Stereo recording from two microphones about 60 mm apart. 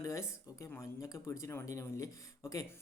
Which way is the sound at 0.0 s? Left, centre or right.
Left.